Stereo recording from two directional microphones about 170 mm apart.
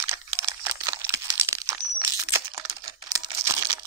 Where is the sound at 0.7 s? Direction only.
15° right (ahead or behind).